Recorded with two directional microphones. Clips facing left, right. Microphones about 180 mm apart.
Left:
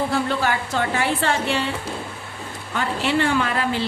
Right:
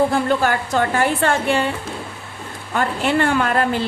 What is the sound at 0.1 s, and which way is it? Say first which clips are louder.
A woman's voice: right 4 dB; 50° right (ahead or behind).